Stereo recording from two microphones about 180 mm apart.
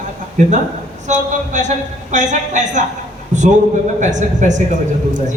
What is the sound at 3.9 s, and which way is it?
Speech, 45° right (ahead or behind).